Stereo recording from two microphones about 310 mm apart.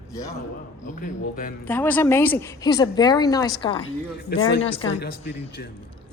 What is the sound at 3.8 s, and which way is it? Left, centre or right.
Speech, left.